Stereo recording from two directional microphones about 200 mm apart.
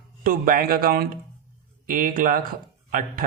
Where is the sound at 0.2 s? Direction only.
45° right (ahead or behind).